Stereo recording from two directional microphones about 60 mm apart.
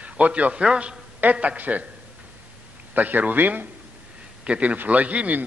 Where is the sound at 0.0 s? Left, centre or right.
Right.